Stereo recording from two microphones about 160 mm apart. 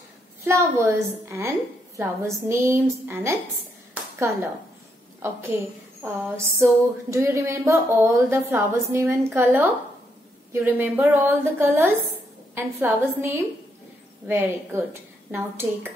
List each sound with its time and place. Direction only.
0.5 s speech: 15° right (ahead or behind)
3.9 s a sound: 15° right (ahead or behind)
6.0 s speech: 15° right (ahead or behind)